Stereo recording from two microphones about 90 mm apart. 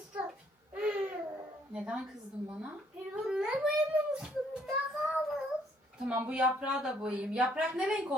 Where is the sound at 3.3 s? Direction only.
10° right (ahead or behind).